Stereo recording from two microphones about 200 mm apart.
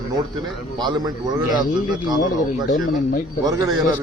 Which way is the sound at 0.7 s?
20° right (ahead or behind).